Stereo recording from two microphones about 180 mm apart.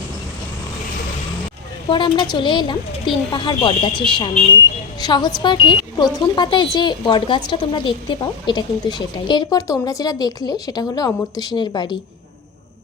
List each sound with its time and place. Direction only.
1.9 s speech: 25° left (ahead or behind)